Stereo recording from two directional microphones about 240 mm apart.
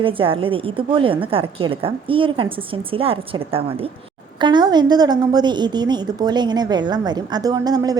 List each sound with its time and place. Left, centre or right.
0.0 s a woman's voice: right